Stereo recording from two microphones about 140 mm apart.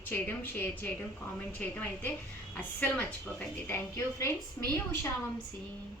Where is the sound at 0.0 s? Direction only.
15° left (ahead or behind).